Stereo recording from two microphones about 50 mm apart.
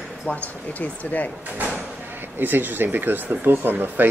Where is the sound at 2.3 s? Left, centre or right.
Right.